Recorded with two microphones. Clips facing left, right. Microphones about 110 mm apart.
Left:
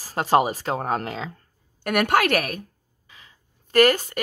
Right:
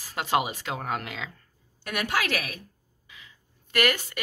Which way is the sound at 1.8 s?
55° left (ahead or behind).